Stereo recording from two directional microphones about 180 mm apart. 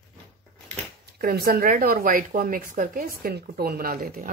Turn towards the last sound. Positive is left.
turn(degrees=-55)  # may be behind; listen again after turning